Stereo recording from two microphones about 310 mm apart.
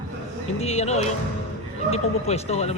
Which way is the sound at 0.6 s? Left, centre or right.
Left.